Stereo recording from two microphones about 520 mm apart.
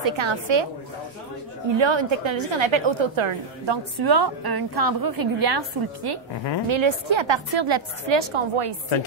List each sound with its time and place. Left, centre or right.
0.1 s a woman's voice: right
1.8 s a woman's voice: right
6.7 s a woman's voice: right